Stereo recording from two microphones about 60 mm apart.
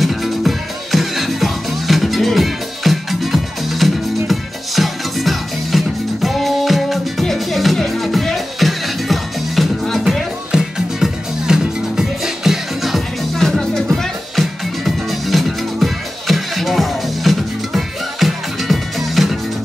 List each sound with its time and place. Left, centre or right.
0.0 s music: centre
10.5 s music: centre